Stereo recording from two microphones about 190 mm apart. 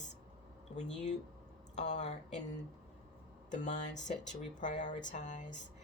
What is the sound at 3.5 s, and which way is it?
A woman's voice, 40° left (ahead or behind).